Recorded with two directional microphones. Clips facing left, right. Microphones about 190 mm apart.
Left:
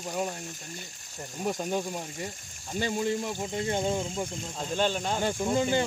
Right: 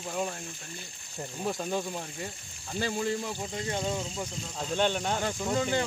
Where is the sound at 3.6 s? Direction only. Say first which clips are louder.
Left 4 dB; 25° left (ahead or behind).